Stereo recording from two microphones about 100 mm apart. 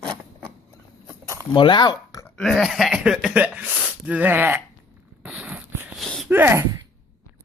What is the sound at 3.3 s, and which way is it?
Speech, 15° right (ahead or behind).